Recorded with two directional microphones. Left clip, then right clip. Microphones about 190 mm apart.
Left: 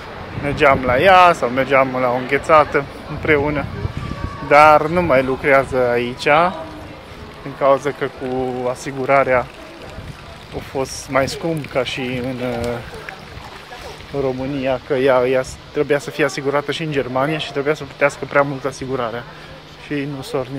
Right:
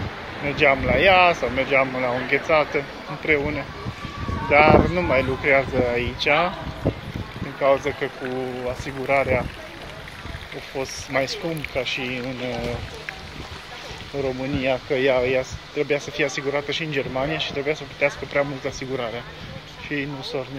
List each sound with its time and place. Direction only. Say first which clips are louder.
0.5 s speech: left 5 dB; 15° left (ahead or behind)
7.6 s speech: left 4 dB; 15° left (ahead or behind)
8.6 s speech: left 5 dB; 25° left (ahead or behind)
10.8 s speech: left 6 dB; 25° left (ahead or behind)
14.6 s speech: left 4 dB; 10° left (ahead or behind); by 20.4 s 25° left (ahead or behind)